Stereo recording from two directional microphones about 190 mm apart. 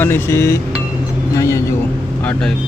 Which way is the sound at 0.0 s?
10° left (ahead or behind).